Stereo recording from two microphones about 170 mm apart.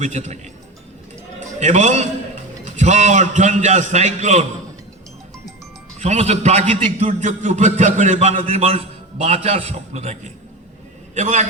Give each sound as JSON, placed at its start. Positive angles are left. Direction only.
{"t": 0.0, "sound": "a man's voice", "side_deg": -45}
{"t": 1.5, "sound": "a man's voice", "side_deg": -45}
{"t": 6.0, "sound": "a man's voice", "side_deg": -40}